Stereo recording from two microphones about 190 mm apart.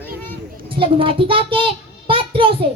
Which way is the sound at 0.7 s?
30° right (ahead or behind).